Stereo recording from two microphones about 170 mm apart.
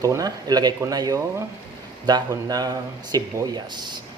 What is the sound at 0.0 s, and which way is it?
Speech, 20° right (ahead or behind).